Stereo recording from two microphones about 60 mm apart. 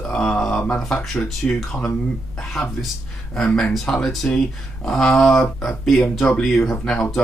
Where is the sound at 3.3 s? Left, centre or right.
Centre.